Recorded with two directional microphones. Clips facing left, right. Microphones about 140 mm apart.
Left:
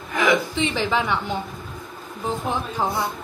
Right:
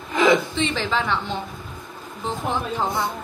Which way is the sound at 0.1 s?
20° right (ahead or behind).